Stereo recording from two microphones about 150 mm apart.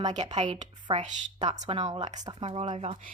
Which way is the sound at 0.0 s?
50° right (ahead or behind).